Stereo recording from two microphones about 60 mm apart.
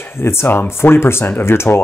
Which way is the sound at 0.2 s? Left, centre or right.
Left.